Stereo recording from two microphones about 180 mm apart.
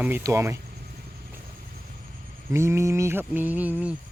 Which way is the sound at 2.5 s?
15° right (ahead or behind).